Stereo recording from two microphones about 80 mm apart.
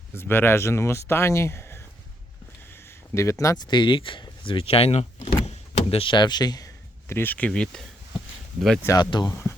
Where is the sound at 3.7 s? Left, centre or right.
Left.